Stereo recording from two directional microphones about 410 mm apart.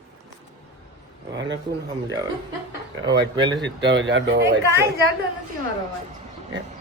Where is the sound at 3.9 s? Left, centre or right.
Right.